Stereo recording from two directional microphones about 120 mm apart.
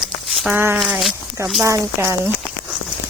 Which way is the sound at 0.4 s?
15° right (ahead or behind).